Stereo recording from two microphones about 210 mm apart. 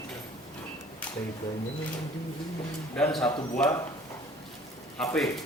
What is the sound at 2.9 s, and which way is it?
Speech, 5° left (ahead or behind).